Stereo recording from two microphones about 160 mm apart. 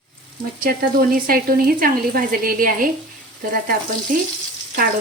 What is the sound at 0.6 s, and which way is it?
Speech, 65° right (ahead or behind).